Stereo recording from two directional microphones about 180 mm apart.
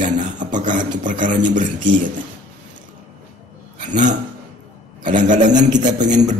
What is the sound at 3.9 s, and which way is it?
Speech, 45° right (ahead or behind).